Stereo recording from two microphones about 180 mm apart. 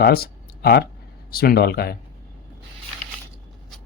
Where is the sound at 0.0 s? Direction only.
60° left (ahead or behind).